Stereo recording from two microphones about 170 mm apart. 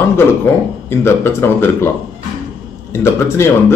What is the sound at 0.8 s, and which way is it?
A man's voice, 15° left (ahead or behind).